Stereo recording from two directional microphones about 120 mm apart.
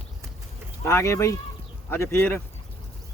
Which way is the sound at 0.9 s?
25° left (ahead or behind).